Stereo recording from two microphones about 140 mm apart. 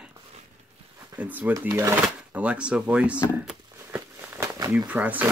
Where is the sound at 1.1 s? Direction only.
10° right (ahead or behind).